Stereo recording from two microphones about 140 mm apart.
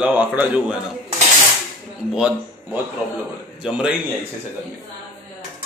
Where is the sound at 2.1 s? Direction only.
5° right (ahead or behind).